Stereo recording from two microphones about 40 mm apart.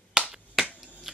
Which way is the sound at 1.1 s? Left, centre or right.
Centre.